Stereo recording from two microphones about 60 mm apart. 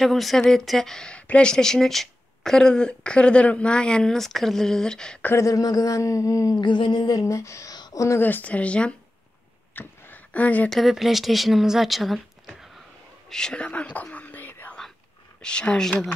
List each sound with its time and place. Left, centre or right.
0.0 s speech: centre
5.3 s speech: left
8.2 s speech: left
9.8 s a sound: left
10.7 s speech: centre
13.3 s speech: centre
14.1 s whispering: left
15.4 s speech: centre